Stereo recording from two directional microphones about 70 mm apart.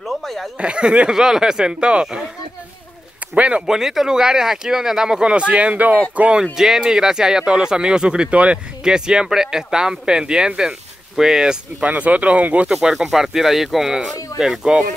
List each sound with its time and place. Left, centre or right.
0.0 s a sound: centre
0.6 s speech: centre
3.3 s speech: centre
6.4 s speech: centre
11.8 s speech: centre
12.6 s speech: centre